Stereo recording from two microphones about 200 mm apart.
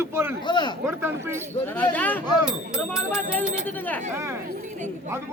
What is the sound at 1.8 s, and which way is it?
Speech, 10° left (ahead or behind).